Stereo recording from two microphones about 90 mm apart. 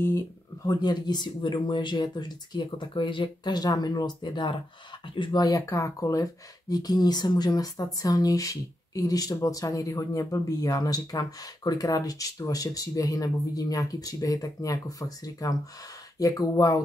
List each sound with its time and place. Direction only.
0.7 s speech: 50° left (ahead or behind)
5.7 s speech: 35° left (ahead or behind)